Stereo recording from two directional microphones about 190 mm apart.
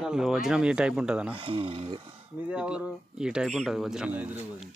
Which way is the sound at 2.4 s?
5° right (ahead or behind).